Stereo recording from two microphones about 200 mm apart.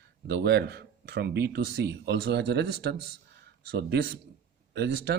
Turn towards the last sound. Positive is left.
turn(degrees=-55)  # may be behind; listen again after turning